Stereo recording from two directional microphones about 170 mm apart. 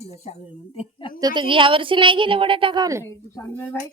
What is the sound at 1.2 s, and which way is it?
Speech, 25° right (ahead or behind).